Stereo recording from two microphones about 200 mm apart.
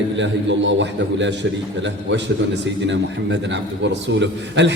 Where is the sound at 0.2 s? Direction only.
65° right (ahead or behind).